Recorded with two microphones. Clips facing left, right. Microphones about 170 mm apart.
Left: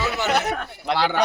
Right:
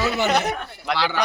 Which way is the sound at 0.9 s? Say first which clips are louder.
Left 3 dB; 50° left (ahead or behind).